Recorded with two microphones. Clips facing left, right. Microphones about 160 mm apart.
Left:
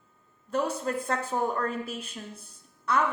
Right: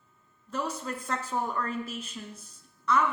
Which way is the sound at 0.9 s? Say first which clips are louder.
Left 4 dB; 50° left (ahead or behind).